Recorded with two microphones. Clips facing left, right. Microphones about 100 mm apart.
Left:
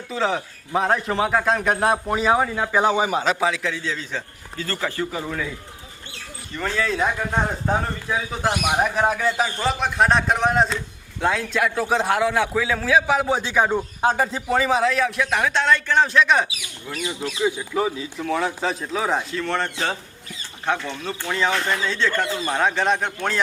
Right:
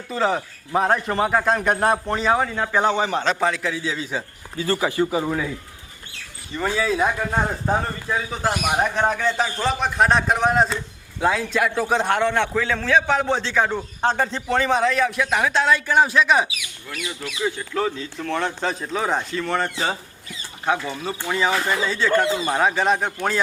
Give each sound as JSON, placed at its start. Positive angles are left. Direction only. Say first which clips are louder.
{"t": 0.1, "sound": "a man's voice", "louder": "right 2 dB", "side_deg": 0}
{"t": 6.5, "sound": "a man's voice", "louder": "right 2 dB", "side_deg": -5}
{"t": 16.6, "sound": "speech", "louder": "left 2 dB", "side_deg": 35}
{"t": 17.4, "sound": "a man's voice", "louder": "left 1 dB", "side_deg": 10}